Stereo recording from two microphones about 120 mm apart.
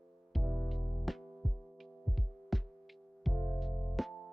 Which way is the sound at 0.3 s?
Centre (ahead or behind).